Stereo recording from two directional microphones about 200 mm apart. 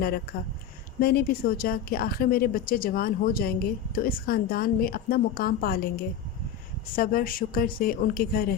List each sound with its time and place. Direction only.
0.9 s a woman's voice: 50° left (ahead or behind)